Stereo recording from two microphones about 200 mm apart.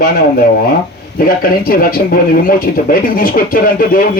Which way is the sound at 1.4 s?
45° left (ahead or behind).